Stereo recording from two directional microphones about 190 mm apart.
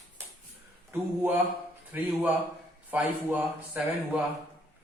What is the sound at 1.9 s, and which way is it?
Speech, 10° right (ahead or behind).